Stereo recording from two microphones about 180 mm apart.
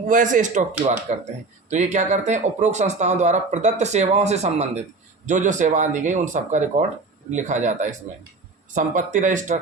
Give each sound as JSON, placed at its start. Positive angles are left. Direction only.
{"t": 0.1, "sound": "speech", "side_deg": -45}